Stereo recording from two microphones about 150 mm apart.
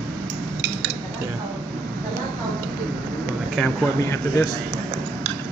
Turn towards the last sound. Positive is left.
turn(degrees=20)  # may be behind; listen again after turning